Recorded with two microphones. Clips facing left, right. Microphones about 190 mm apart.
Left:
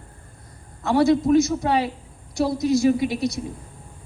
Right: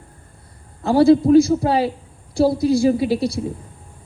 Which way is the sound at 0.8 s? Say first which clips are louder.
Right 5 dB; 30° right (ahead or behind).